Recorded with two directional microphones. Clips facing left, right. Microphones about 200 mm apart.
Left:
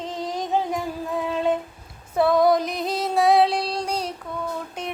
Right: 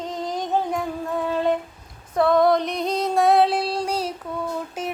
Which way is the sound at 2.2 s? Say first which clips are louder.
Even; centre (ahead or behind).